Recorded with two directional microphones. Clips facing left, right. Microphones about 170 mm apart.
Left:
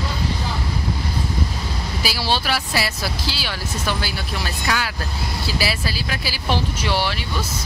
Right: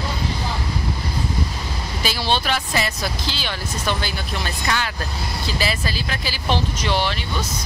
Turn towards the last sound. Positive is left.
turn(degrees=10)  # may be behind; listen again after turning